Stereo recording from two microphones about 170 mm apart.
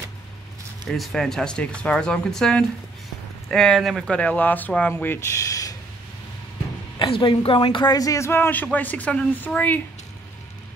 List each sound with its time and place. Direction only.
0.8 s speech: centre (ahead or behind); by 5.8 s 20° left (ahead or behind)
7.0 s speech: 30° left (ahead or behind); by 9.8 s 10° left (ahead or behind)